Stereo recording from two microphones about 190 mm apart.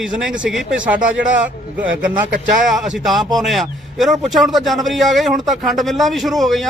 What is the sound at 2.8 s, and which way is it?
A man's voice, centre (ahead or behind).